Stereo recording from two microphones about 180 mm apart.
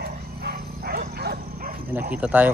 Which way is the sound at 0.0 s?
60° right (ahead or behind).